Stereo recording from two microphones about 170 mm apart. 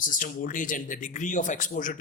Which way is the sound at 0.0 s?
50° left (ahead or behind).